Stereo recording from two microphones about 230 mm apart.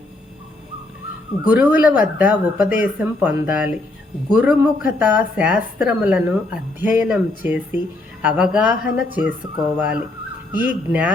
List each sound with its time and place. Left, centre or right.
1.5 s a woman's voice: centre